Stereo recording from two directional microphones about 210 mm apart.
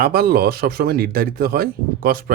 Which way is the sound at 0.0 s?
45° right (ahead or behind).